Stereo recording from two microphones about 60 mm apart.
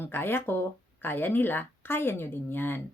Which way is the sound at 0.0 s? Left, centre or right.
Left.